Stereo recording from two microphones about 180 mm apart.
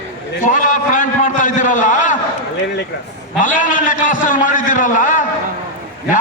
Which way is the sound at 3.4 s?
45° left (ahead or behind).